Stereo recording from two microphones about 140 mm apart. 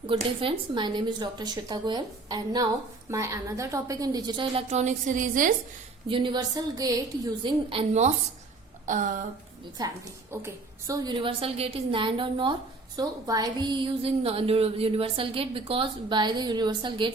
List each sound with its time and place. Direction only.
0.1 s a woman's voice: 40° right (ahead or behind); by 5.5 s 70° right (ahead or behind)
6.1 s a woman's voice: 35° right (ahead or behind)
7.7 s a woman's voice: 45° right (ahead or behind)
8.9 s a sound: 65° right (ahead or behind)
9.8 s a woman's voice: 30° right (ahead or behind)